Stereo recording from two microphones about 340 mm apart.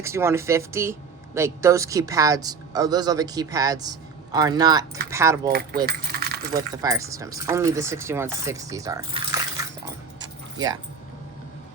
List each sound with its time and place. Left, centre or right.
0.0 s speech: centre
5.5 s speech: right
6.5 s speech: centre